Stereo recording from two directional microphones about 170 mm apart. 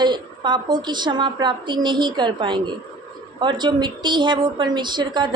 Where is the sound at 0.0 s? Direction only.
25° right (ahead or behind).